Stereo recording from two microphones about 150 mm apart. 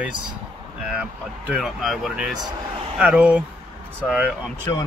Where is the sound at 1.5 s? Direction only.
Centre (ahead or behind).